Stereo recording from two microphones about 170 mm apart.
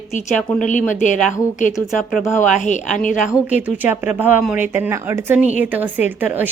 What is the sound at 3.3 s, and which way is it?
A woman's voice, 10° right (ahead or behind).